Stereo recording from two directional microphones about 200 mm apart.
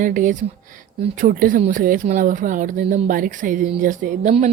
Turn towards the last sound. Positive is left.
turn(degrees=-40)  # may be behind; listen again after turning